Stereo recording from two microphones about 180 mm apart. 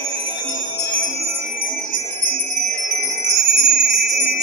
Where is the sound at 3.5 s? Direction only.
65° right (ahead or behind).